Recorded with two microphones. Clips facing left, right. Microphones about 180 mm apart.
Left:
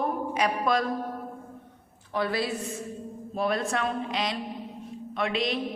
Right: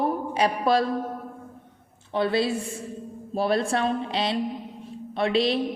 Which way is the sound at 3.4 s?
30° right (ahead or behind).